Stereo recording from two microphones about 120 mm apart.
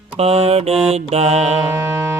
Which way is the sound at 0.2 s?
55° right (ahead or behind).